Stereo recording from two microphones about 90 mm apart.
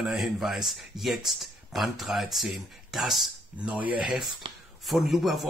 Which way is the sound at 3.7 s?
15° right (ahead or behind).